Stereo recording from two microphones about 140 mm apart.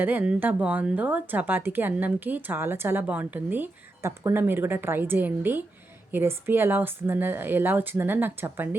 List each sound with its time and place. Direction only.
0.0 s speech: 10° right (ahead or behind)